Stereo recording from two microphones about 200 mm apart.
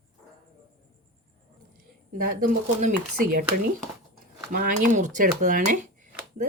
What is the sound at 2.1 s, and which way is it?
Speech, 45° right (ahead or behind).